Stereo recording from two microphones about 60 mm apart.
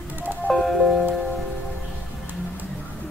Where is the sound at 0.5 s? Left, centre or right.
Centre.